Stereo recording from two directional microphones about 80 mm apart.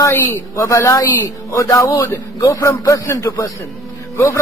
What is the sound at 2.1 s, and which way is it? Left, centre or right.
A man's voice, left.